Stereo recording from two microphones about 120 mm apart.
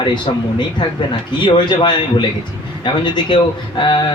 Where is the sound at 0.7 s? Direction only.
40° left (ahead or behind).